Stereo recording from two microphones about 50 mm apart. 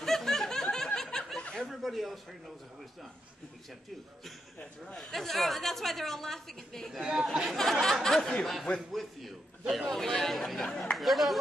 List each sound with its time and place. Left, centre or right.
0.0 s snicker: centre
0.9 s a sound: centre
5.1 s a woman's voice: centre
6.9 s a man's voice: centre
7.5 s a woman's voice: centre
8.2 s speech: centre
8.7 s a woman's voice: centre